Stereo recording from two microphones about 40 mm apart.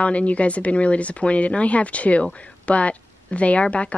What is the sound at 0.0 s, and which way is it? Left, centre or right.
Speech, left.